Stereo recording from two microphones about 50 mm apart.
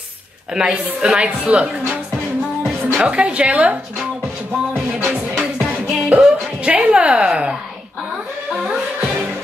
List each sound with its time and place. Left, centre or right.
0.6 s a woman's voice: centre
5.1 s music: right
6.7 s a sound: right
8.5 s music: centre